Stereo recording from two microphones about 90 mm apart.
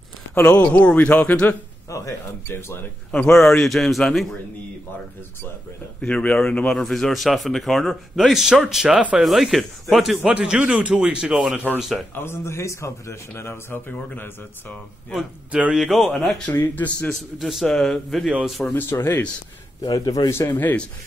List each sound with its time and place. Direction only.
0.3 s a man's voice: 15° left (ahead or behind)
1.9 s speech: 35° left (ahead or behind)
3.1 s a man's voice: 10° left (ahead or behind)
5.9 s a man's voice: 10° left (ahead or behind)
10.3 s speech: 15° right (ahead or behind)
12.2 s speech: 25° left (ahead or behind)
15.1 s a man's voice: 10° right (ahead or behind)
16.5 s speech: 20° left (ahead or behind)
17.4 s a man's voice: centre (ahead or behind)
18.7 s speech: 25° left (ahead or behind)
19.9 s speech: 45° left (ahead or behind)
20.2 s speech: 25° left (ahead or behind)